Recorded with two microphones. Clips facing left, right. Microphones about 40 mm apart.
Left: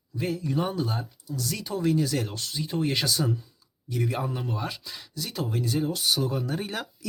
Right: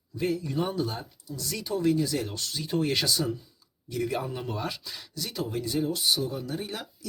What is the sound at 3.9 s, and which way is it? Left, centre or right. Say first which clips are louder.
Speech: even; left.